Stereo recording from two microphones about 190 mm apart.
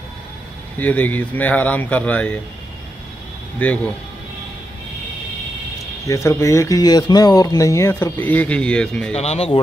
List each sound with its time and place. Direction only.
0.7 s speech: 10° left (ahead or behind)
3.5 s speech: 10° left (ahead or behind)
6.0 s speech: 15° left (ahead or behind)
9.1 s speech: 35° left (ahead or behind)